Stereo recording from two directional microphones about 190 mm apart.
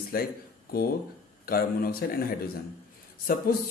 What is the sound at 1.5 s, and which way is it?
Speech, 50° left (ahead or behind).